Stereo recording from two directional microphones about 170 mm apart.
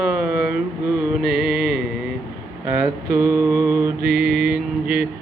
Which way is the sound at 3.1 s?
15° right (ahead or behind).